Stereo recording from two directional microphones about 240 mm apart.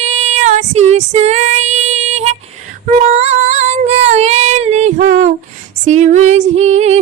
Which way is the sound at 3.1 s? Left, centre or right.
Right.